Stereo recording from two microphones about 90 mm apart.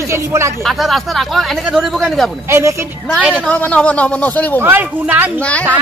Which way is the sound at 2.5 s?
30° right (ahead or behind).